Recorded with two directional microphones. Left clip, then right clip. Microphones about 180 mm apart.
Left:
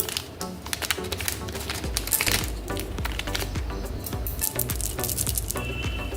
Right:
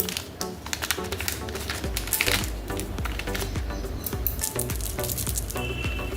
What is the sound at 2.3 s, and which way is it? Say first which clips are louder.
Music: even; 10° left (ahead or behind).